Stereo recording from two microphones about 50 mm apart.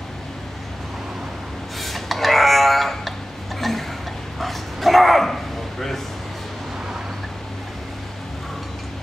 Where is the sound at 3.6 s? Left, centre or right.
Centre.